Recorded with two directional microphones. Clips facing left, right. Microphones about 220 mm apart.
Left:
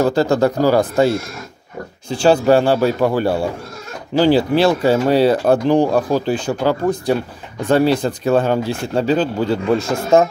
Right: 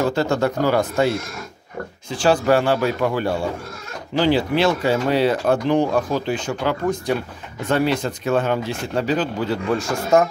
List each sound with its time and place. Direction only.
0.0 s speech: 35° left (ahead or behind)